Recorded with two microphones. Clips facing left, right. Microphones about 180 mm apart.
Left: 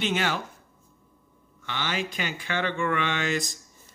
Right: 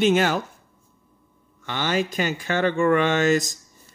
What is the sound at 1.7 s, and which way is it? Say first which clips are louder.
Speech: right 7 dB; 45° right (ahead or behind).